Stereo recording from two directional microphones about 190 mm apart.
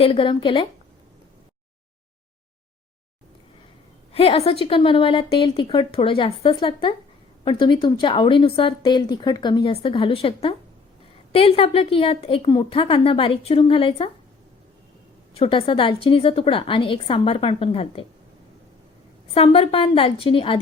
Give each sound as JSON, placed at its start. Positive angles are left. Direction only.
{"t": 0.0, "sound": "a woman's voice", "side_deg": 30}
{"t": 4.1, "sound": "a woman's voice", "side_deg": 30}
{"t": 15.4, "sound": "a woman's voice", "side_deg": 30}
{"t": 19.3, "sound": "a woman's voice", "side_deg": 30}